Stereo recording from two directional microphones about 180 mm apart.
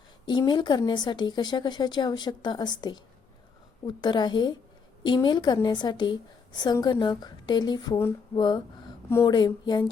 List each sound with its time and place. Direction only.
0.3 s a woman's voice: 25° left (ahead or behind)